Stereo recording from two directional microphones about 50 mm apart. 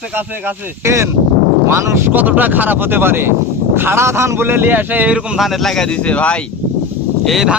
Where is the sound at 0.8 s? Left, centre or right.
Right.